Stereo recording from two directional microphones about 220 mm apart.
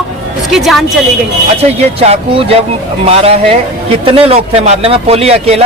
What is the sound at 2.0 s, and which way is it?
Speech, 25° right (ahead or behind).